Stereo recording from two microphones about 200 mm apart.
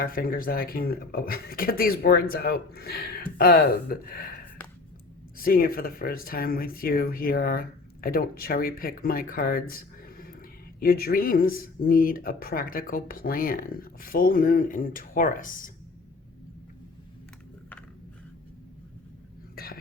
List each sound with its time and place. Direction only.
0.0 s speech: 45° left (ahead or behind)
5.4 s speech: 45° left (ahead or behind)
19.5 s a sound: 50° left (ahead or behind)